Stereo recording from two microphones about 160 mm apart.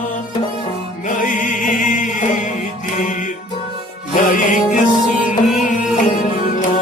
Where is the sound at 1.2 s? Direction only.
55° left (ahead or behind).